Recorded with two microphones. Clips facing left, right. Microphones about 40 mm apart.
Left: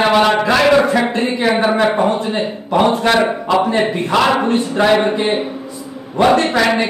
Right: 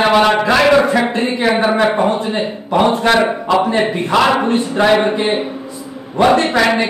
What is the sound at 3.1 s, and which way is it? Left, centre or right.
A man's voice, centre.